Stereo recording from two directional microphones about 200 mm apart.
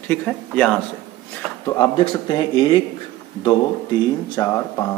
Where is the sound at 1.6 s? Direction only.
20° left (ahead or behind).